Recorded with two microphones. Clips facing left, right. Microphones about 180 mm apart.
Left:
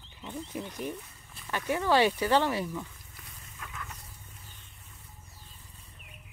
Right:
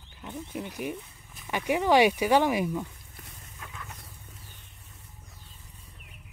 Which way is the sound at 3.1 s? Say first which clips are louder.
Right 2 dB; 30° right (ahead or behind).